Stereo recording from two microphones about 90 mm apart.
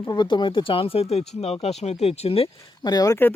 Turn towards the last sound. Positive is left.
turn(degrees=45)  # may be behind; listen again after turning